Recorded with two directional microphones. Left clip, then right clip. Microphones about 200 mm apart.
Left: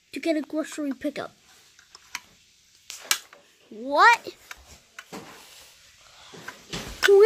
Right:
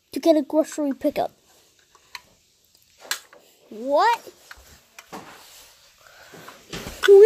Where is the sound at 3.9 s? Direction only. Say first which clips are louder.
Left 2 dB; 20° left (ahead or behind).